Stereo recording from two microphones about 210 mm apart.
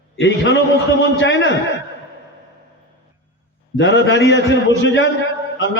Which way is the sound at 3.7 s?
60° left (ahead or behind).